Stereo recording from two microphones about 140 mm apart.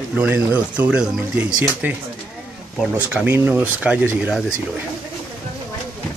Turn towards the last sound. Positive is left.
turn(degrees=-10)  # may be behind; listen again after turning